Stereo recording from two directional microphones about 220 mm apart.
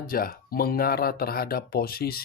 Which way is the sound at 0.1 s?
40° left (ahead or behind).